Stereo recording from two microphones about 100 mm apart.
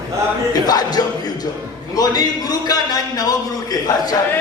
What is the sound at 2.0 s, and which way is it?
A man's voice, 40° left (ahead or behind).